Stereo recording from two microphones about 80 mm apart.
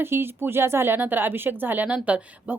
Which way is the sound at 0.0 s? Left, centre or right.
Right.